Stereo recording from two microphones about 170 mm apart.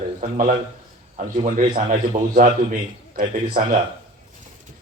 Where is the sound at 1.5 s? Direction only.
50° right (ahead or behind).